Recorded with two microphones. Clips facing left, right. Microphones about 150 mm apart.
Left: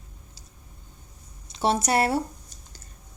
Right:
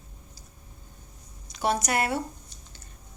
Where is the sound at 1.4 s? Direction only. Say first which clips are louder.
Left 3 dB; 25° left (ahead or behind).